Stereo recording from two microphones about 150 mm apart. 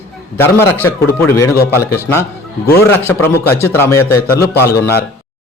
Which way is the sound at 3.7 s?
15° left (ahead or behind).